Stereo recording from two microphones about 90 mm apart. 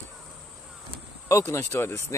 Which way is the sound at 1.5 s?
35° left (ahead or behind).